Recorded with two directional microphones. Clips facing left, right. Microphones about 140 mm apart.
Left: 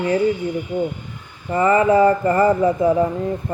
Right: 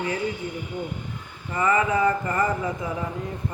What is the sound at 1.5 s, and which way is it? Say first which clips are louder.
Speech: left 7 dB; 35° left (ahead or behind).